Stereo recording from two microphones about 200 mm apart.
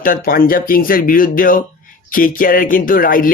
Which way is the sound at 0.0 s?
45° left (ahead or behind).